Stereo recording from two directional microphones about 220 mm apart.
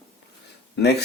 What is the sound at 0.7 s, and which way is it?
Speech, 50° left (ahead or behind).